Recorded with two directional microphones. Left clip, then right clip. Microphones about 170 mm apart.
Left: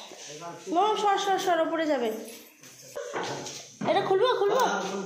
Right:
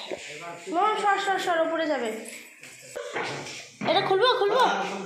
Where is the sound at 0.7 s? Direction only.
25° left (ahead or behind).